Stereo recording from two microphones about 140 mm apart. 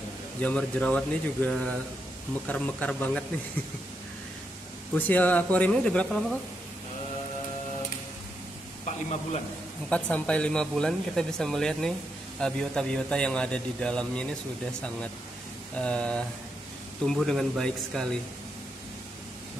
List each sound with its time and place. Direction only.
0.4 s a man's voice: 10° left (ahead or behind)
4.9 s a man's voice: 10° left (ahead or behind)
8.8 s a man's voice: 55° left (ahead or behind)
9.8 s a man's voice: 10° left (ahead or behind)